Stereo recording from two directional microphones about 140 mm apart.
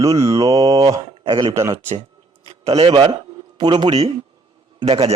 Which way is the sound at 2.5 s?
45° right (ahead or behind).